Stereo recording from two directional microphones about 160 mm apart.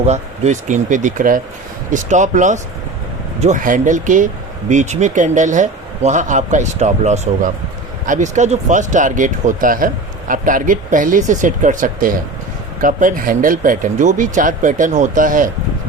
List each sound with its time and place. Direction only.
0.0 s speech: 45° right (ahead or behind)